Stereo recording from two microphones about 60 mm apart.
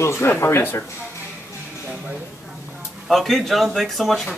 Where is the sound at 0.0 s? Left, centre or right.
Left.